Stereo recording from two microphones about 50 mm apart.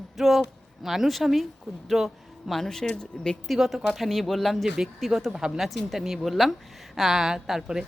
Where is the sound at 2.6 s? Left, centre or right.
Centre.